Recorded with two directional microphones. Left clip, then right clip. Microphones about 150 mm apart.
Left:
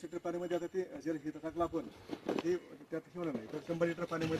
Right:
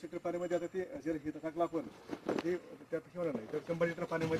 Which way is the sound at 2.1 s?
10° left (ahead or behind).